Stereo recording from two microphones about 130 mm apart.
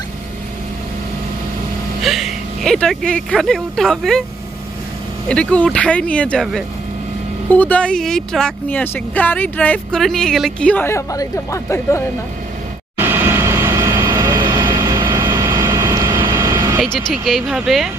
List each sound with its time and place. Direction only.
2.0 s speech: centre (ahead or behind)
5.3 s speech: 10° left (ahead or behind)
7.5 s speech: 10° left (ahead or behind)
10.9 s speech: 25° left (ahead or behind)
13.0 s vehicle: 20° right (ahead or behind)
16.8 s speech: centre (ahead or behind)